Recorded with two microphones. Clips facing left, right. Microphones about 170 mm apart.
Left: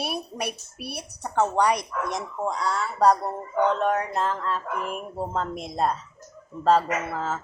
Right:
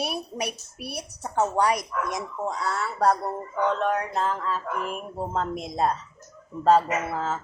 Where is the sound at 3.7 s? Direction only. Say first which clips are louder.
Left 1 dB; centre (ahead or behind).